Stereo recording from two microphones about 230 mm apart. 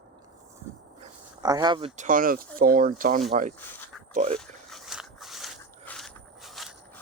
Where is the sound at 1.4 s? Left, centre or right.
Centre.